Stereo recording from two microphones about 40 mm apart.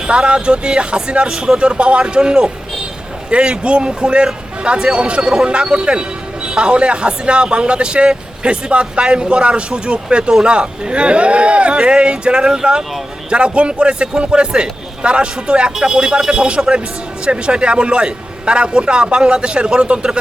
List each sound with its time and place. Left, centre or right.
0.1 s a man's voice: right